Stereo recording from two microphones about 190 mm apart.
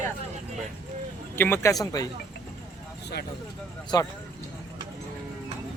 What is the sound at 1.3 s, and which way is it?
Speech, 10° left (ahead or behind).